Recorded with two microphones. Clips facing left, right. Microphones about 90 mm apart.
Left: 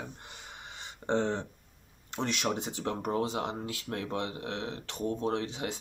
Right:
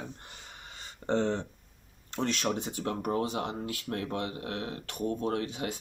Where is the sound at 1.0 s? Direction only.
20° left (ahead or behind).